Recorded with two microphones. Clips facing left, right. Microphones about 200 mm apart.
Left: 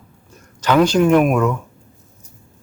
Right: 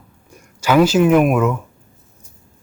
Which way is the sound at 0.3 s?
10° right (ahead or behind).